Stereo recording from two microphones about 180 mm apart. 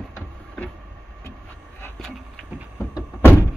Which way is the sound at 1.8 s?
Centre (ahead or behind).